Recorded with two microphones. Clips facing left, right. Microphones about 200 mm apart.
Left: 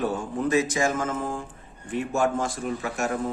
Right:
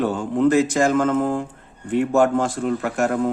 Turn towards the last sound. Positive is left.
turn(degrees=-65)  # may be behind; listen again after turning